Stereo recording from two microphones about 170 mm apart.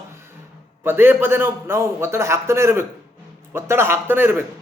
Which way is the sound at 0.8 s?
15° right (ahead or behind).